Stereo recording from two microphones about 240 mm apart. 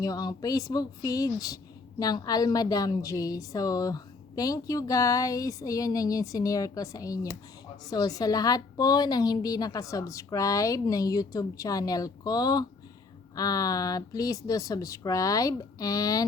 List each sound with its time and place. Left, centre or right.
0.0 s a woman's voice: centre